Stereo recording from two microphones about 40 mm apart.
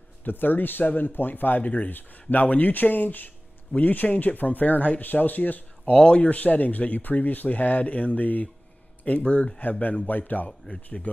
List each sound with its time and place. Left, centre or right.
0.2 s speech: left
1.6 s speech: left
5.9 s speech: left
6.2 s speech: left
9.2 s speech: left
9.6 s speech: left
10.7 s speech: left